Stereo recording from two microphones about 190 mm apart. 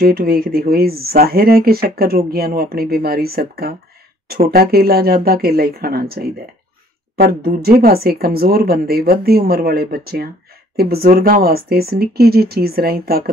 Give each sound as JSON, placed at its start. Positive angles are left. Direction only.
{"t": 0.0, "sound": "a woman's voice", "side_deg": -55}